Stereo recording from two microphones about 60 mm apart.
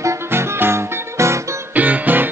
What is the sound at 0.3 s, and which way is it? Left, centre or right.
Music, right.